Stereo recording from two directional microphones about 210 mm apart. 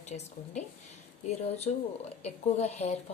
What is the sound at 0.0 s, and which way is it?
Speech, 35° left (ahead or behind).